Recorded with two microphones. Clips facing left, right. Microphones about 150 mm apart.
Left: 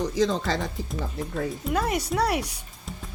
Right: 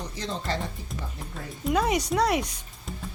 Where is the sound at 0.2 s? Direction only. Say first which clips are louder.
Left 6 dB; 90° left.